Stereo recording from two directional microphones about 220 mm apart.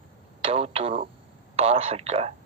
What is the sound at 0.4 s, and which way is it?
Speech, 25° right (ahead or behind).